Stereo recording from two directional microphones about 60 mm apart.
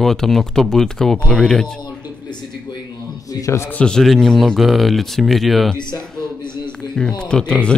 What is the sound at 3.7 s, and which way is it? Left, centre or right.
Speech, centre.